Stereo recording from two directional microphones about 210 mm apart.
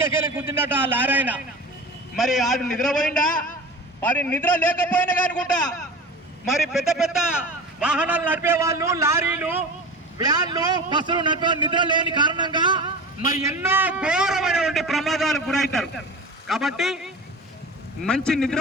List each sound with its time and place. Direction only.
0.3 s a man's voice: 10° right (ahead or behind)